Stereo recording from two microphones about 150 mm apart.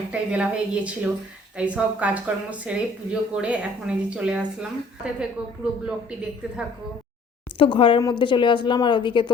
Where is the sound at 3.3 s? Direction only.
5° right (ahead or behind).